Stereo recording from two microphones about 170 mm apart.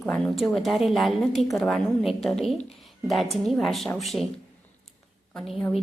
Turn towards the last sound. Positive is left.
turn(degrees=0)  # may be behind; listen again after turning